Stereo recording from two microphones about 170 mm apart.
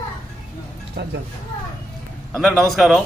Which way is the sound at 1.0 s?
90° right.